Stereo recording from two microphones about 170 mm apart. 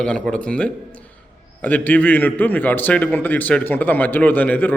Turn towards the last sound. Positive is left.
turn(degrees=10)  # may be behind; listen again after turning